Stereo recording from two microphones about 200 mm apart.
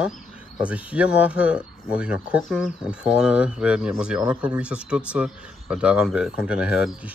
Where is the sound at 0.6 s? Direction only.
5° right (ahead or behind).